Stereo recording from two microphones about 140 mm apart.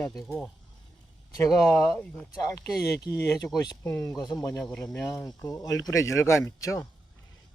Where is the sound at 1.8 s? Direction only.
10° left (ahead or behind).